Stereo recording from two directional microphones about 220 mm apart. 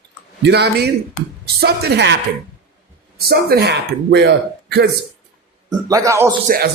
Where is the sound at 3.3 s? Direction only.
45° right (ahead or behind).